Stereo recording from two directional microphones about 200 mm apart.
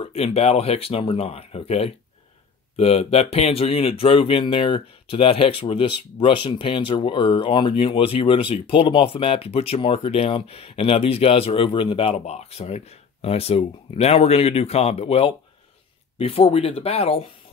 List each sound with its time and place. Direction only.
0.0 s speech: 30° left (ahead or behind)